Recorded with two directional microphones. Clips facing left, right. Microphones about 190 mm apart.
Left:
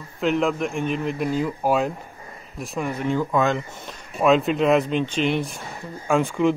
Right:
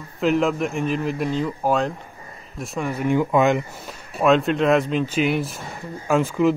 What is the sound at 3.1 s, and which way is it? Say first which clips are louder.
Speech: right 4 dB; 15° right (ahead or behind).